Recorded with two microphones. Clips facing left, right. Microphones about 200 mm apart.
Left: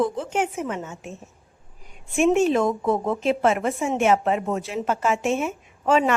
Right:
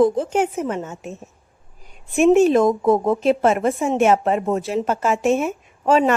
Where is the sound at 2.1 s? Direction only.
40° right (ahead or behind).